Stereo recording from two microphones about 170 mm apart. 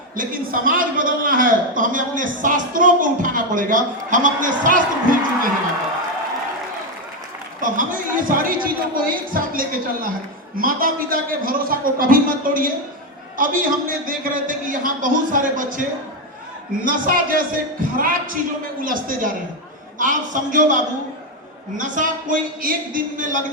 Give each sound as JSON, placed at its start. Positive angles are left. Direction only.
{"t": 0.2, "sound": "a man's voice", "side_deg": -55}
{"t": 7.6, "sound": "a sound", "side_deg": -50}
{"t": 10.6, "sound": "a man's voice", "side_deg": -55}